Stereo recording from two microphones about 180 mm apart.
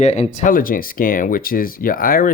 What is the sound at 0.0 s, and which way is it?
Speech, 40° left (ahead or behind).